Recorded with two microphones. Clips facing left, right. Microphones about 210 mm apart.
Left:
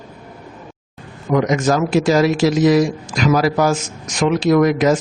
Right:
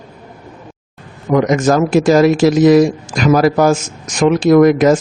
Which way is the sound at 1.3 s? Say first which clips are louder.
Right 4 dB; 50° right (ahead or behind).